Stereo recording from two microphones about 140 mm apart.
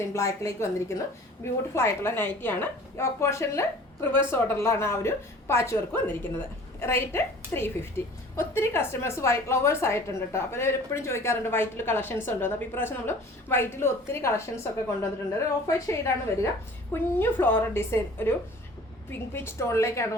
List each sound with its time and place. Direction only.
0.1 s a woman's voice: 20° left (ahead or behind)